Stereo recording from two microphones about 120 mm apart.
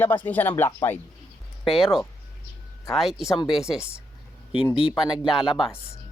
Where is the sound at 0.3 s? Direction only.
15° left (ahead or behind).